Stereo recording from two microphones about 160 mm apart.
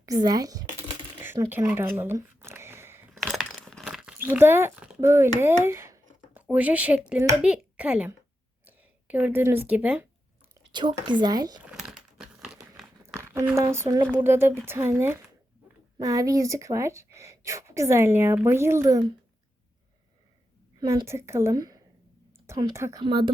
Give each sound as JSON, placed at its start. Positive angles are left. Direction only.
{"t": 0.0, "sound": "speech", "side_deg": -25}
{"t": 2.0, "sound": "a sound", "side_deg": -15}
{"t": 3.2, "sound": "crumpling", "side_deg": 0}
{"t": 4.9, "sound": "speech", "side_deg": -15}
{"t": 5.4, "sound": "a sound", "side_deg": -15}
{"t": 7.4, "sound": "speech", "side_deg": -5}
{"t": 10.7, "sound": "a woman's voice", "side_deg": -30}
{"t": 11.6, "sound": "typing", "side_deg": -5}
{"t": 13.0, "sound": "a sound", "side_deg": -15}
{"t": 13.6, "sound": "speech", "side_deg": -15}
{"t": 20.7, "sound": "a woman's voice", "side_deg": -20}
{"t": 23.0, "sound": "a woman's voice", "side_deg": -30}